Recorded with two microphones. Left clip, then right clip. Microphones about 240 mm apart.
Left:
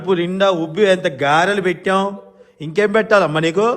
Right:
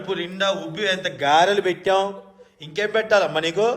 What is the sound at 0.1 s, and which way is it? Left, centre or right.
A man's voice, left.